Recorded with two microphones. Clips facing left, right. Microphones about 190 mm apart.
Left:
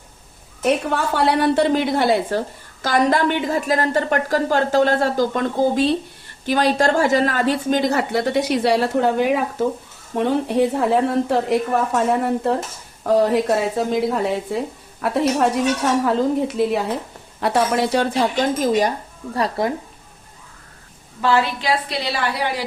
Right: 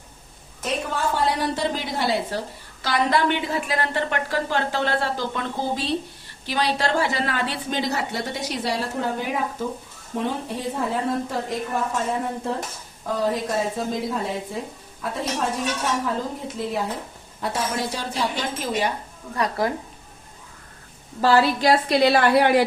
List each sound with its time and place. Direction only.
0.6 s a woman's voice: 70° left (ahead or behind)
19.3 s speech: 30° left (ahead or behind)
21.2 s a woman's voice: 35° right (ahead or behind); by 22.6 s 55° right (ahead or behind)